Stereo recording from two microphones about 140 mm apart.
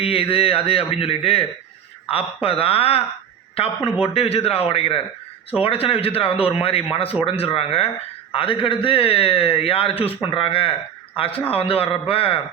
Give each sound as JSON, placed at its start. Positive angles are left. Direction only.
{"t": 0.0, "sound": "a man's voice", "side_deg": 40}